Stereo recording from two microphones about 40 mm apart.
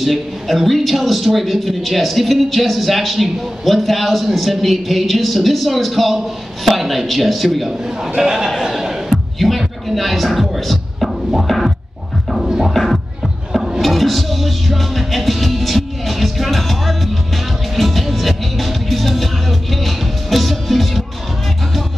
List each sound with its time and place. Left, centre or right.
0.0 s a man's voice: centre
8.6 s music: centre
11.4 s a man's voice: centre
12.4 s music: centre
12.7 s music: centre